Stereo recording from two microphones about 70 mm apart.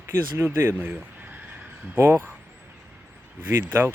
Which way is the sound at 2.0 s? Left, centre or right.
Right.